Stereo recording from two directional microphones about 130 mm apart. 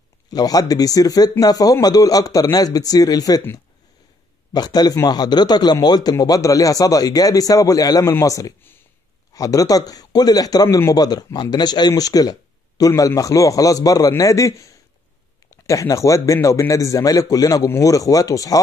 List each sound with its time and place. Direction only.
0.3 s speech: 30° left (ahead or behind)
4.6 s speech: 30° left (ahead or behind)